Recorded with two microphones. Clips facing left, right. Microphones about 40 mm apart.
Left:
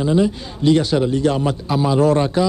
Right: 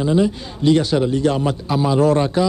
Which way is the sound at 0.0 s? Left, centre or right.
Centre.